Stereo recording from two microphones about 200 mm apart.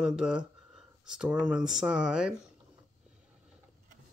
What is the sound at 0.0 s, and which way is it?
Speech, 5° right (ahead or behind).